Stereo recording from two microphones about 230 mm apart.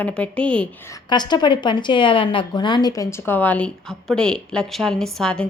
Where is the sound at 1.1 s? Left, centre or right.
Centre.